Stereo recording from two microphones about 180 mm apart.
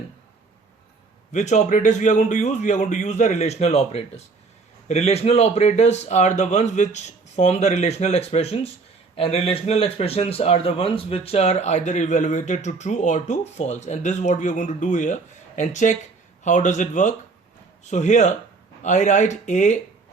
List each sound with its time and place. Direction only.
1.3 s speech: 40° left (ahead or behind)